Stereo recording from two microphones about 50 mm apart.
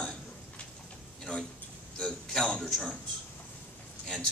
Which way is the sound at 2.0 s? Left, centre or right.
Centre.